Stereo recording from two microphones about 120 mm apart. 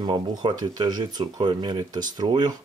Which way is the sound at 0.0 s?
40° right (ahead or behind).